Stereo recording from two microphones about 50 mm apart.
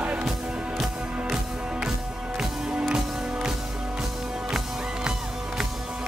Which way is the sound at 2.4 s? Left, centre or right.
Centre.